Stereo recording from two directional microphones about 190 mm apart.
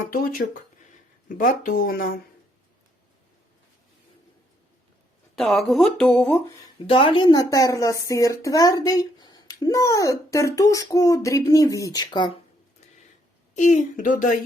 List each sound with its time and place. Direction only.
0.1 s speech: 50° left (ahead or behind)
5.4 s speech: centre (ahead or behind)
6.8 s a woman's voice: 30° left (ahead or behind)
13.6 s speech: 40° left (ahead or behind)